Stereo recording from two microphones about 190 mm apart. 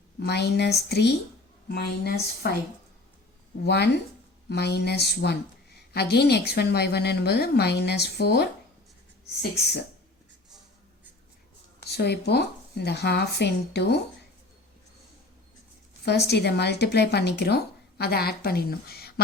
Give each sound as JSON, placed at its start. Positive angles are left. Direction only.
{"t": 0.2, "sound": "speech", "side_deg": 60}
{"t": 3.6, "sound": "speech", "side_deg": 60}
{"t": 11.9, "sound": "speech", "side_deg": 60}
{"t": 16.0, "sound": "speech", "side_deg": 60}